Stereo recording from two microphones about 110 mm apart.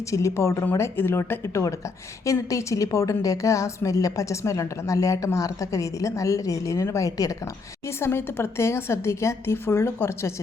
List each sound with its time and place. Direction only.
0.1 s a woman's voice: 30° left (ahead or behind)